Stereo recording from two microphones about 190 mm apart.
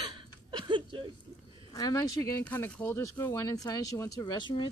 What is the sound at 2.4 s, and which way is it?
Speech, 10° left (ahead or behind).